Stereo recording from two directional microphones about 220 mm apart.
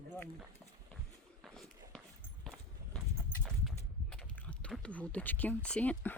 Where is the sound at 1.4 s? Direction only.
Centre (ahead or behind).